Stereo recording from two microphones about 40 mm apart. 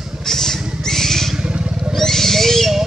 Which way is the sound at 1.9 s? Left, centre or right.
Centre.